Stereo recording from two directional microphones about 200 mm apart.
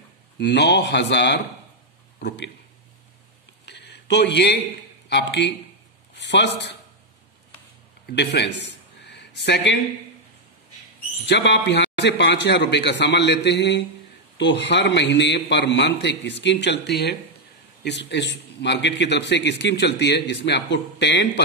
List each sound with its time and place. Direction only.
0.4 s a man's voice: 60° left (ahead or behind)
3.6 s a sound: 55° left (ahead or behind)
5.1 s a man's voice: 60° left (ahead or behind)
8.1 s a man's voice: 60° left (ahead or behind)
11.2 s a man's voice: 60° left (ahead or behind)